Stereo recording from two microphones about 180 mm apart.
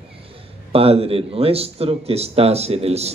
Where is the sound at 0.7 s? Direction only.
35° right (ahead or behind).